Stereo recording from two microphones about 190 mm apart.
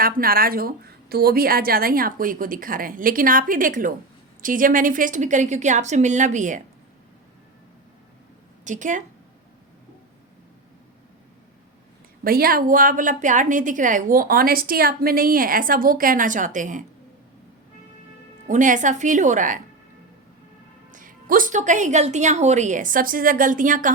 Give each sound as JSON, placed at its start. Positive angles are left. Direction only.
{"t": 0.0, "sound": "a woman's voice", "side_deg": -50}
{"t": 8.6, "sound": "a woman's voice", "side_deg": -40}
{"t": 12.2, "sound": "a woman's voice", "side_deg": -50}
{"t": 18.4, "sound": "a woman's voice", "side_deg": -40}
{"t": 20.9, "sound": "a woman's voice", "side_deg": -45}